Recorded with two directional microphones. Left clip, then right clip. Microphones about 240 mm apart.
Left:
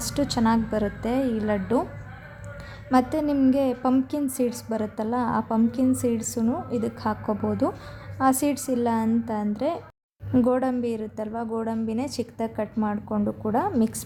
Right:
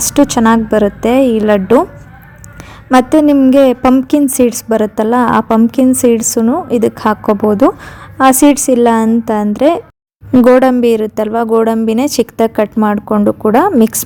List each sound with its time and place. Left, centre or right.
0.0 s a woman's voice: right
2.9 s a woman's voice: right